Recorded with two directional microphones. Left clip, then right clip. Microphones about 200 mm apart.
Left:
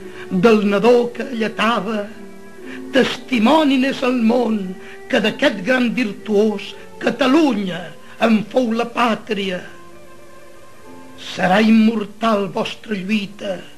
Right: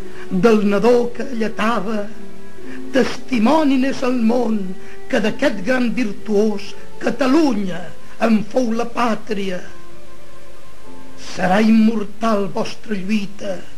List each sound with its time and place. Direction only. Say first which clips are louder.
0.1 s a woman's voice: left 1 dB; 30° right (ahead or behind)
11.2 s a woman's voice: left 1 dB; 30° right (ahead or behind)